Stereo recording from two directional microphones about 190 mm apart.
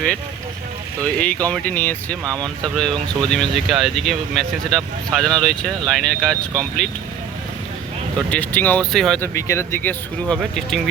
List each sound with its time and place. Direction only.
1.0 s speech: 5° left (ahead or behind)
2.2 s speech: 20° right (ahead or behind)
2.7 s speech: 5° left (ahead or behind)
8.3 s speech: 10° left (ahead or behind)
9.3 s speech: 15° left (ahead or behind)